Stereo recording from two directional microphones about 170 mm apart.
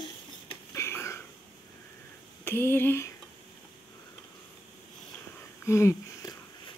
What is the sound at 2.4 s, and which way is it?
Speech, 15° left (ahead or behind).